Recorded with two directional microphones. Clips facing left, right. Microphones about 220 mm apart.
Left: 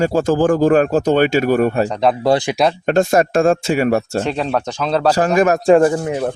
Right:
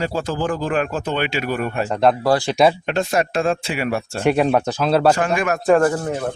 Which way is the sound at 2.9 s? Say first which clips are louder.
Left 6 dB; 45° left (ahead or behind).